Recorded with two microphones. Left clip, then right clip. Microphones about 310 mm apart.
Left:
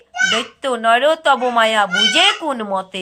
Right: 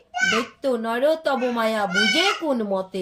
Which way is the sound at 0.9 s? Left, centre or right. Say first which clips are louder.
Left 10 dB; centre.